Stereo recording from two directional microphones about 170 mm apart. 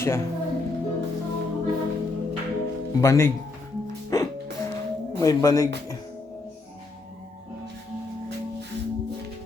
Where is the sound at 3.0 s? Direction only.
15° left (ahead or behind).